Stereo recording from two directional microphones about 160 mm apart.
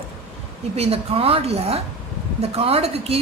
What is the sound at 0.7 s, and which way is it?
A woman's voice, 40° right (ahead or behind).